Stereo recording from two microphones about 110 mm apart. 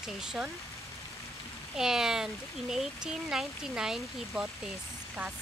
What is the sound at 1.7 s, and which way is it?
Speech, 5° right (ahead or behind).